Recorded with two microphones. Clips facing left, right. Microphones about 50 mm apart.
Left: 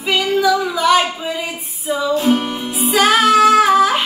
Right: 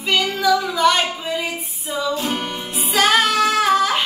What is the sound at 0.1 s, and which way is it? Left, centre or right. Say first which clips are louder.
Female singing: left 2 dB; centre.